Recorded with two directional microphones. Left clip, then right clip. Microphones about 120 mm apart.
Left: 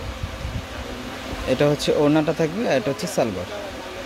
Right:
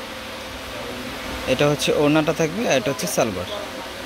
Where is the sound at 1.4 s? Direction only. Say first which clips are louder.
Even; 20° left (ahead or behind).